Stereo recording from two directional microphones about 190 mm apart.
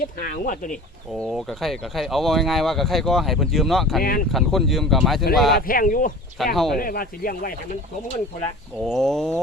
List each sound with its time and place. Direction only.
0.0 s speech: 45° left (ahead or behind)
1.2 s speech: centre (ahead or behind)
5.5 s speech: 50° left (ahead or behind)
6.4 s speech: centre (ahead or behind)
6.7 s speech: 50° left (ahead or behind)
8.8 s speech: centre (ahead or behind)